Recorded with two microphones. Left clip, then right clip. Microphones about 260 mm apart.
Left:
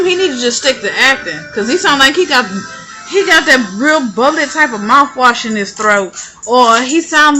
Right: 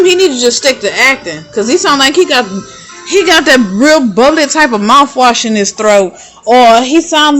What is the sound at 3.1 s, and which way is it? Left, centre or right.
A woman's voice, right.